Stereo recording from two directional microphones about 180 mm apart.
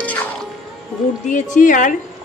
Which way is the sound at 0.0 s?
10° left (ahead or behind).